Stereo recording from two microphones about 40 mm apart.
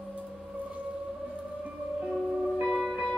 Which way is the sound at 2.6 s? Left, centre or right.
Centre.